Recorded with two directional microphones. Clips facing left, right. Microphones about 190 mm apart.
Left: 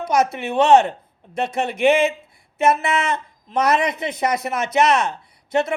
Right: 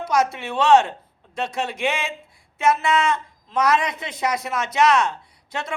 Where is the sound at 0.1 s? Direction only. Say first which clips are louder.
Left 2 dB; 20° left (ahead or behind).